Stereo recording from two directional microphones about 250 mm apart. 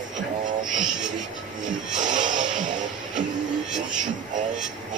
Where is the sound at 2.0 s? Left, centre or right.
Right.